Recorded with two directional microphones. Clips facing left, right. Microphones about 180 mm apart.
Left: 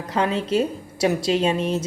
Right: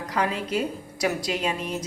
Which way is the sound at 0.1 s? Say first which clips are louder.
Left 5 dB; 25° left (ahead or behind).